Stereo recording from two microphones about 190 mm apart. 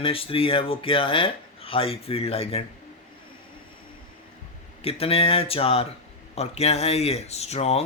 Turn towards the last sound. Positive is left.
turn(degrees=35)  # may be behind; listen again after turning